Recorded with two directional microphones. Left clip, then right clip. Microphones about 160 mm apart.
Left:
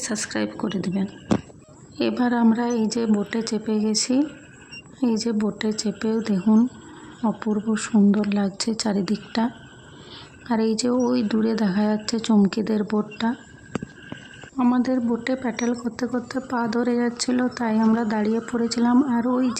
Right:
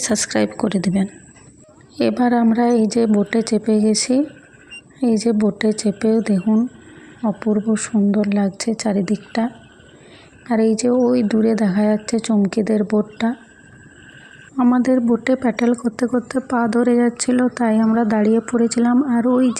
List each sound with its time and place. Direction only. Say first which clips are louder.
0.0 s speech: right 8 dB; 20° right (ahead or behind)
14.6 s speech: right 6 dB; 25° right (ahead or behind)